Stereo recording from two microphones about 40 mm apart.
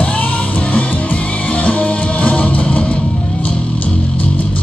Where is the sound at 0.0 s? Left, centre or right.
Left.